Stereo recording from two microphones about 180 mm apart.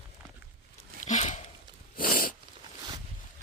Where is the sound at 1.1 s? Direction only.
40° left (ahead or behind).